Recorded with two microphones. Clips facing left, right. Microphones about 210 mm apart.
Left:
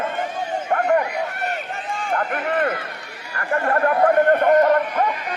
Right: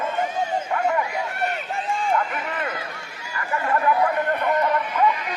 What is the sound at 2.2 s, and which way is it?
Speech, 50° left (ahead or behind).